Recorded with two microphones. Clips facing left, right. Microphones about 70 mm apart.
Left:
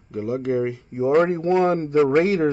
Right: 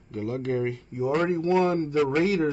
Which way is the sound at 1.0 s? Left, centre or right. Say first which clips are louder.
Left 6 dB; left.